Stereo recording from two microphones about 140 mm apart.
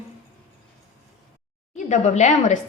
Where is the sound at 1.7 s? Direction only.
60° left (ahead or behind).